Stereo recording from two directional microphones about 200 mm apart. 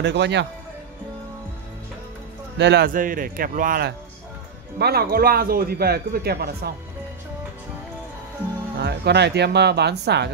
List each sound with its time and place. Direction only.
0.0 s speech: 60° right (ahead or behind)
2.5 s speech: 60° right (ahead or behind)
2.9 s a man's voice: 45° right (ahead or behind)
8.8 s speech: 55° right (ahead or behind)